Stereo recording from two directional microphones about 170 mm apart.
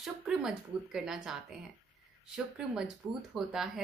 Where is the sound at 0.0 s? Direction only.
5° right (ahead or behind).